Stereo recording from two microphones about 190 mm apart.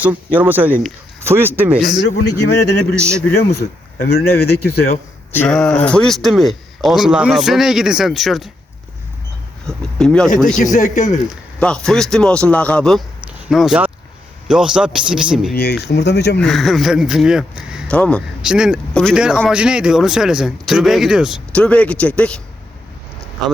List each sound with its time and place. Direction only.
0.0 s speech: 10° right (ahead or behind)
2.0 s speech: 65° left (ahead or behind)
2.9 s speech: 15° right (ahead or behind)
3.9 s speech: 55° left (ahead or behind)
5.3 s speech: 5° left (ahead or behind)
9.6 s speech: 5° left (ahead or behind)
10.6 s speech: 40° left (ahead or behind)
11.3 s speech: 5° left (ahead or behind)
15.8 s speech: 60° left (ahead or behind)
16.4 s speech: centre (ahead or behind)
17.9 s speech: 5° left (ahead or behind)
18.4 s speech: 5° right (ahead or behind)